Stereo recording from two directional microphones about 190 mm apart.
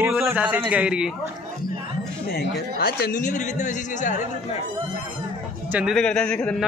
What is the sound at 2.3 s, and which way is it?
A man's voice, 55° left (ahead or behind).